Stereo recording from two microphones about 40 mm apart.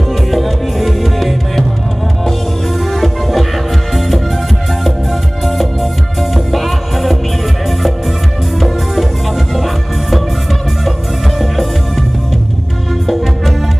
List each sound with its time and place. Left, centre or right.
0.1 s music: centre
11.3 s music: centre